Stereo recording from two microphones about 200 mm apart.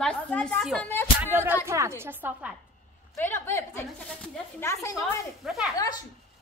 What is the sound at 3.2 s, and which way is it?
Speech, 10° left (ahead or behind).